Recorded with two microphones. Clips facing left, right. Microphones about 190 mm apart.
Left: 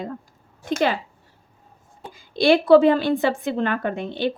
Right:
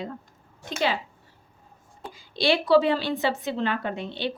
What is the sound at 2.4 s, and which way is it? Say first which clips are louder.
A woman's voice: left 6 dB; 50° left (ahead or behind).